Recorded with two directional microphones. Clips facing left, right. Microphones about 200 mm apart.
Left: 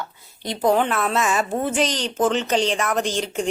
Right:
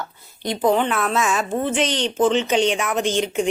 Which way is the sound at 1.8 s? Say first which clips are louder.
Right 1 dB; 35° left (ahead or behind).